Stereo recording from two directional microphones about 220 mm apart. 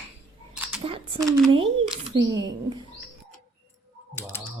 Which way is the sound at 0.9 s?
25° right (ahead or behind).